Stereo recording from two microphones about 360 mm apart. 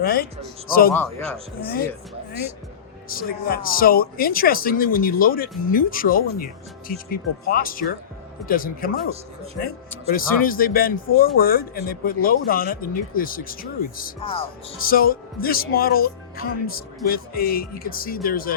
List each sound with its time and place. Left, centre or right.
0.0 s speech: left
3.1 s speech: left
10.1 s speech: left